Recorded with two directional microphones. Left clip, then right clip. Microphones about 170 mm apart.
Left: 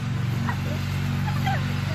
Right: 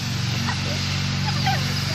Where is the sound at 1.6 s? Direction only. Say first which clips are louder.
Right 5 dB; 40° right (ahead or behind).